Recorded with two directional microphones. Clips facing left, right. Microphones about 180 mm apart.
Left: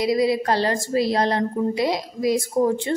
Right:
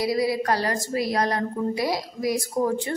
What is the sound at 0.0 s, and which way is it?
A woman's voice, 20° left (ahead or behind).